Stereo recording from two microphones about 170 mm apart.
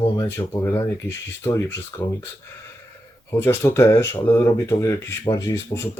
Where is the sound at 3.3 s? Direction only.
15° left (ahead or behind).